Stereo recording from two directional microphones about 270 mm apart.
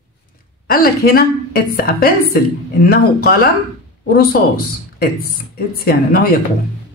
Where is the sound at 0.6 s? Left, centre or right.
Left.